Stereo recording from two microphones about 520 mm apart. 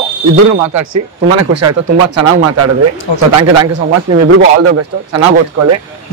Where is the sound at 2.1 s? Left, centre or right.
Right.